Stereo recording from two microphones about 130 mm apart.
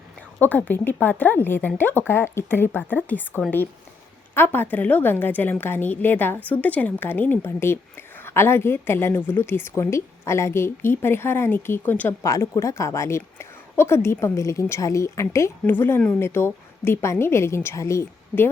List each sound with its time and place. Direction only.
0.3 s a woman's voice: 15° left (ahead or behind)